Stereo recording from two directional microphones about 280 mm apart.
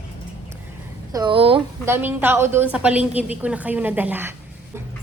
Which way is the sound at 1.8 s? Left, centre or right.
Centre.